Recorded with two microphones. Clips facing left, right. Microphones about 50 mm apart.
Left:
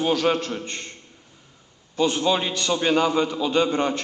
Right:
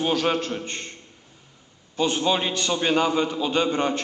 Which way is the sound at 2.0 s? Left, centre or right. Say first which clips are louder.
Left 1 dB; right.